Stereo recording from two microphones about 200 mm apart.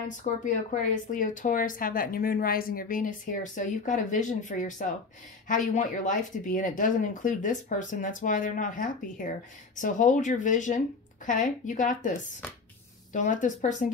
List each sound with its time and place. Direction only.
0.2 s speech: 40° left (ahead or behind)
13.1 s speech: 40° left (ahead or behind)